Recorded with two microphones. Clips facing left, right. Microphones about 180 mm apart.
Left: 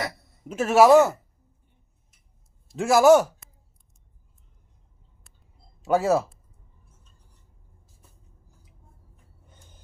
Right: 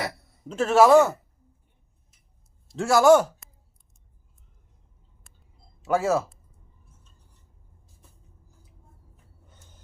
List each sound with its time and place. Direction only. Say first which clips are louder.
0.4 s a man's voice: left 1 dB; 10° left (ahead or behind)
2.7 s a man's voice: left 1 dB; 10° left (ahead or behind)
5.8 s speech: left 2 dB; 20° left (ahead or behind)